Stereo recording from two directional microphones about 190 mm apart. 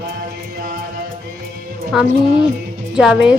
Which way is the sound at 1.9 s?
Centre (ahead or behind).